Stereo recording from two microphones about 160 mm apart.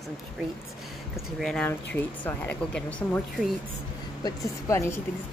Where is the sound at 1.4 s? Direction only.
5° left (ahead or behind).